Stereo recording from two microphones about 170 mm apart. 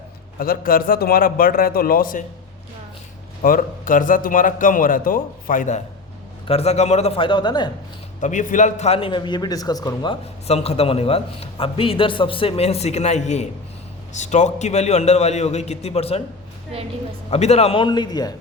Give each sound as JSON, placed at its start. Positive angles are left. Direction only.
{"t": 0.3, "sound": "a man's voice", "side_deg": 60}
{"t": 3.4, "sound": "a man's voice", "side_deg": 55}
{"t": 8.2, "sound": "a man's voice", "side_deg": 50}
{"t": 10.4, "sound": "a man's voice", "side_deg": 35}
{"t": 17.3, "sound": "a man's voice", "side_deg": 40}